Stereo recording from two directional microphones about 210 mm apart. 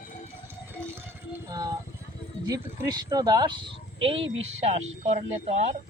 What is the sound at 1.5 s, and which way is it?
Speech, 15° right (ahead or behind).